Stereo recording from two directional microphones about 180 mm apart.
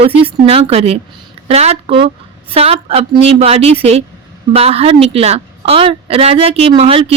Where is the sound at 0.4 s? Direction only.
35° right (ahead or behind).